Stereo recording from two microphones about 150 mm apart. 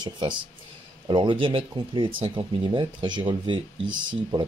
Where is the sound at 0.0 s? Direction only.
30° right (ahead or behind).